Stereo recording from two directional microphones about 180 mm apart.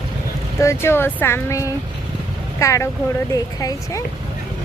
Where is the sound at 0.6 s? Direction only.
15° left (ahead or behind).